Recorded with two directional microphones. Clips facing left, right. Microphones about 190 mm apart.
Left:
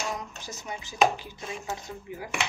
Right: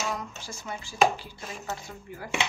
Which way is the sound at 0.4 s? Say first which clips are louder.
Even; 20° left (ahead or behind).